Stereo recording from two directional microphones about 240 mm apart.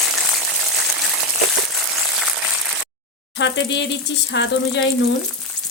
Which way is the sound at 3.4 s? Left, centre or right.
Left.